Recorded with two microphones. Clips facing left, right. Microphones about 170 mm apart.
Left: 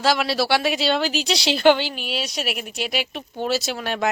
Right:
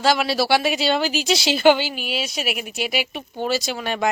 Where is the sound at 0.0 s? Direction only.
Centre (ahead or behind).